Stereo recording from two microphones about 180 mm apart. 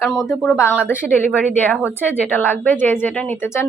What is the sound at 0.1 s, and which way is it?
Speech, centre (ahead or behind).